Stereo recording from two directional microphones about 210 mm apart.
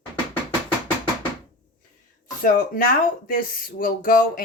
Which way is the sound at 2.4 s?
40° left (ahead or behind).